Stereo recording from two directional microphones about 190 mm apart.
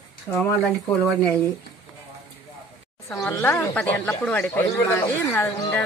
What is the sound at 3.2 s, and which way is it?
Speech, 15° left (ahead or behind).